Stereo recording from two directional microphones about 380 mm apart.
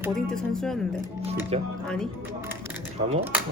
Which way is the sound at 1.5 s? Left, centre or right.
Centre.